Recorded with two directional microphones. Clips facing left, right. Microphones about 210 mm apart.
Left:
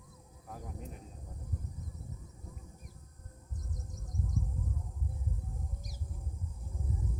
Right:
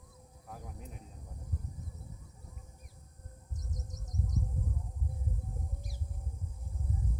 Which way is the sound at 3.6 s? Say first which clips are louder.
Even; 40° right (ahead or behind).